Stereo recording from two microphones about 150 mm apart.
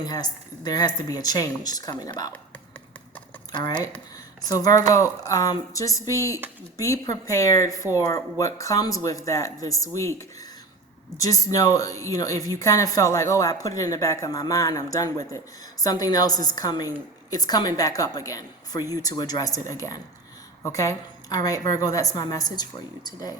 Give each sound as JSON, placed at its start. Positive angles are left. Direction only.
{"t": 0.0, "sound": "speech", "side_deg": 25}
{"t": 3.5, "sound": "speech", "side_deg": 30}